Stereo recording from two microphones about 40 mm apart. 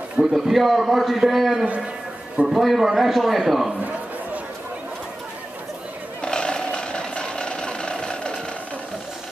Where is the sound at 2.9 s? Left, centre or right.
Centre.